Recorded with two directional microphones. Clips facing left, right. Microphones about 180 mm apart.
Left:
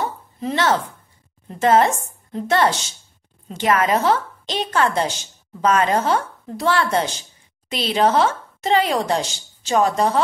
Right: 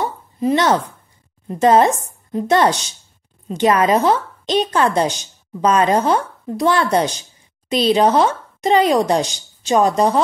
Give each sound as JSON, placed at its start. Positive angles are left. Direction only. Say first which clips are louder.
{"t": 0.4, "sound": "a woman's voice", "louder": "right 4 dB", "side_deg": -15}